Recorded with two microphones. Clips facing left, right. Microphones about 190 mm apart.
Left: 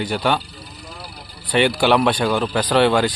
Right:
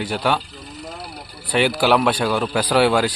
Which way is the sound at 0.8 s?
60° right (ahead or behind).